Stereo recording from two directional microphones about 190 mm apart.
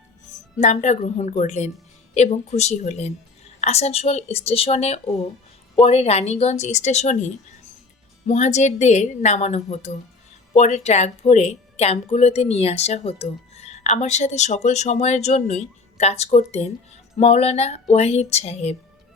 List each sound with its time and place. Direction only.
0.6 s speech: 40° left (ahead or behind)